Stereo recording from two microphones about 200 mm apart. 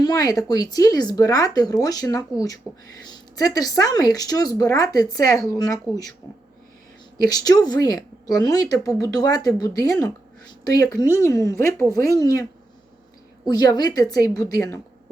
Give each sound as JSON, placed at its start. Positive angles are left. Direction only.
{"t": 0.0, "sound": "a woman's voice", "side_deg": 20}
{"t": 7.3, "sound": "a woman's voice", "side_deg": 20}
{"t": 13.5, "sound": "a woman's voice", "side_deg": 20}